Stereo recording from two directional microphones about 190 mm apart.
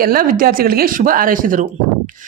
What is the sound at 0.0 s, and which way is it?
Speech, 50° right (ahead or behind).